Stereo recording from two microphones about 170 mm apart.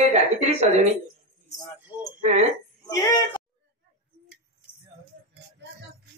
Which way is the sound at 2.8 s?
20° left (ahead or behind).